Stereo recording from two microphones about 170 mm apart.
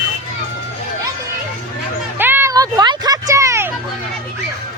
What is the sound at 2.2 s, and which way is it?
Music, 10° right (ahead or behind).